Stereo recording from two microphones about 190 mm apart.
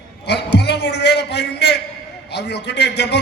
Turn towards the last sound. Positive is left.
turn(degrees=65)  # may be behind; listen again after turning